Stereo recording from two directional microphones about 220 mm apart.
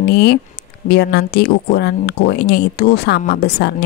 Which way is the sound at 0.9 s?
50° left (ahead or behind).